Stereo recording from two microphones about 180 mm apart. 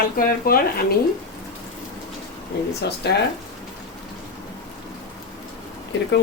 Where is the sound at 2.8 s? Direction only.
65° left (ahead or behind).